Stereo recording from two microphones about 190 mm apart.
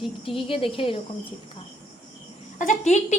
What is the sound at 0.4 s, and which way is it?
Speech, 30° left (ahead or behind).